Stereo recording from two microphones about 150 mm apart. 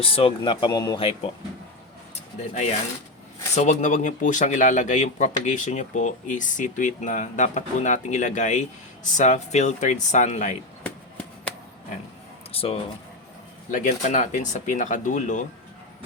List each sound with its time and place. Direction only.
0.0 s speech: 40° left (ahead or behind)
3.5 s speech: 50° left (ahead or behind)
10.8 s chop: 10° left (ahead or behind)
12.5 s speech: 40° left (ahead or behind)
13.7 s speech: 60° left (ahead or behind)